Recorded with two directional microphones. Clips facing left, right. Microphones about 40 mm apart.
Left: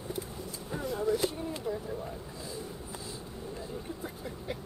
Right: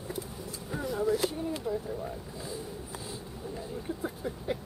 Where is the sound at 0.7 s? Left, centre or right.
Centre.